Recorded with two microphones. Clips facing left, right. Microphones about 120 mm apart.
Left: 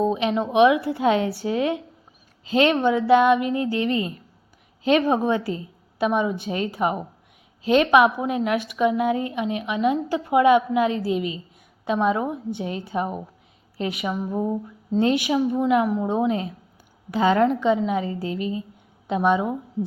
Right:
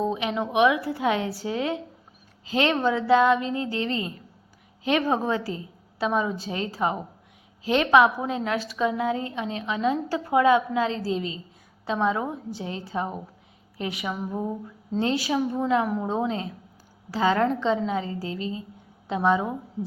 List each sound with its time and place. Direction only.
0.0 s a woman's voice: 20° left (ahead or behind)